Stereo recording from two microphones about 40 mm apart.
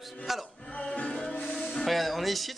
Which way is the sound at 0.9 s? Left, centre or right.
Left.